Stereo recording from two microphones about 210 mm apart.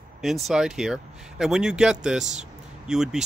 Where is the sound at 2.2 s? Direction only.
35° right (ahead or behind).